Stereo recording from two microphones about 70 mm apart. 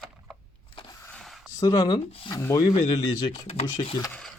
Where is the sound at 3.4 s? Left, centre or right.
Left.